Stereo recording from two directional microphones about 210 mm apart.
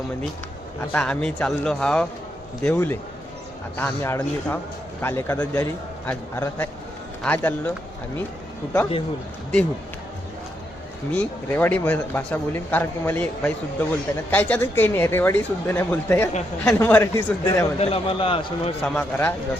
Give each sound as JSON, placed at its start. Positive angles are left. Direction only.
{"t": 0.9, "sound": "speech", "side_deg": 5}
{"t": 11.1, "sound": "speech", "side_deg": 5}
{"t": 17.7, "sound": "a man's voice", "side_deg": 25}
{"t": 18.8, "sound": "speech", "side_deg": 5}